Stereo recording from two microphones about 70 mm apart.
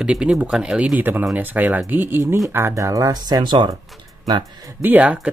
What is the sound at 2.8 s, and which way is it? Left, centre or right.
Speech, right.